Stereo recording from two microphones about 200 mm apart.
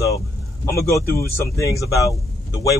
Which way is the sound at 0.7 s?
15° left (ahead or behind).